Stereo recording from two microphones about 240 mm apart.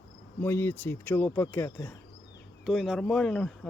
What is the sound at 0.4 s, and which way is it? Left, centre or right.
Speech, centre.